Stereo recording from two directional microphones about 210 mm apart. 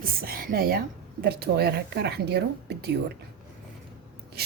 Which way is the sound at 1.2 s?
50° right (ahead or behind).